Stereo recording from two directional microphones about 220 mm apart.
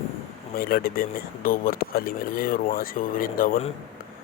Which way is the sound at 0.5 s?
40° left (ahead or behind).